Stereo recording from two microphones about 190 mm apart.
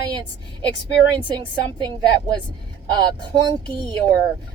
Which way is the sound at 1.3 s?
25° right (ahead or behind).